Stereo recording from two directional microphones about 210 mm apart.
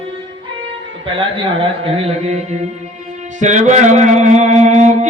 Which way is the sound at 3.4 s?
35° right (ahead or behind).